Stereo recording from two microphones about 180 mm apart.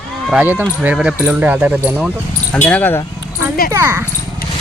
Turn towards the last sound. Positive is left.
turn(degrees=-15)  # may be behind; listen again after turning